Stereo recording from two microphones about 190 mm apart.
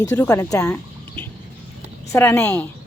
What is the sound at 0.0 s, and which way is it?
Speech, 15° left (ahead or behind).